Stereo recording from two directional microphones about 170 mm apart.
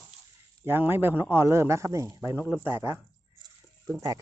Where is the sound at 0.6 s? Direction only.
10° right (ahead or behind).